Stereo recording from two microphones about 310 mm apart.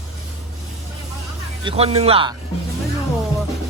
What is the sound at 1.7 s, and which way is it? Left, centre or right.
Speech, centre.